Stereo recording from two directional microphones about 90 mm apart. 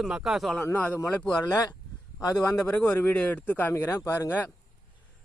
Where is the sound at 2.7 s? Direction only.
20° left (ahead or behind).